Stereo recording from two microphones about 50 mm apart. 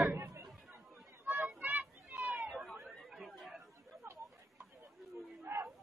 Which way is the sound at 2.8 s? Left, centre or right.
Centre.